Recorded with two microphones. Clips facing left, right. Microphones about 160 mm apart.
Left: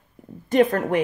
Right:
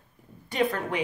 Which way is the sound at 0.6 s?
50° left (ahead or behind).